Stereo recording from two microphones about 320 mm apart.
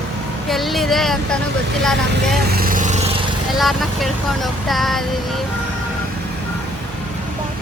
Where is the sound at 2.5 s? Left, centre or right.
Right.